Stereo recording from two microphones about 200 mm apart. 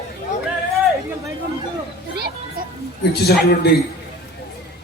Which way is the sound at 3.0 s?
55° left (ahead or behind).